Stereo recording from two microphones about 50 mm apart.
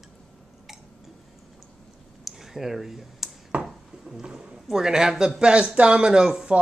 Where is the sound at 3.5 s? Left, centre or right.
Right.